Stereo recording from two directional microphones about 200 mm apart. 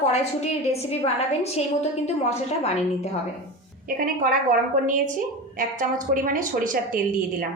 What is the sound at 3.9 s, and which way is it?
A woman's voice, 45° right (ahead or behind).